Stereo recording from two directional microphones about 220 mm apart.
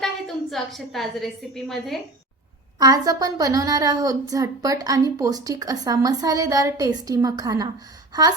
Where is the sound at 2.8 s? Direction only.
15° right (ahead or behind).